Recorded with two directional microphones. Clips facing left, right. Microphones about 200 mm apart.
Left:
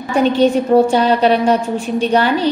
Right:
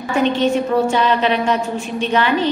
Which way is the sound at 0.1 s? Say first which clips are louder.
Left 4 dB; 35° left (ahead or behind).